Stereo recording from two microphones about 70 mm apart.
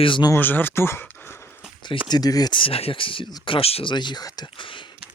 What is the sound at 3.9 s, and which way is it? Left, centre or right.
Speech, left.